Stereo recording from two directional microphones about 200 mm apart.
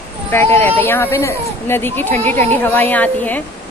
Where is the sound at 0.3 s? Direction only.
10° left (ahead or behind).